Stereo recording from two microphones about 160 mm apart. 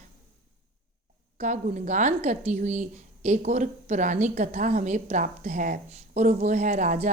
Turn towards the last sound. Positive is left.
turn(degrees=-45)  # may be behind; listen again after turning